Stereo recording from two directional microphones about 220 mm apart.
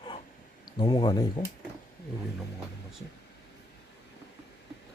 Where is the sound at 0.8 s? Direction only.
20° left (ahead or behind).